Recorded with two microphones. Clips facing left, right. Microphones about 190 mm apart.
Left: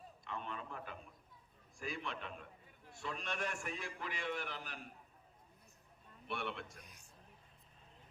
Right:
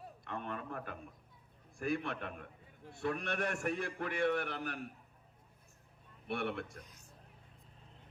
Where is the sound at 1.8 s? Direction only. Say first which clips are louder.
Right 8 dB; 60° right (ahead or behind).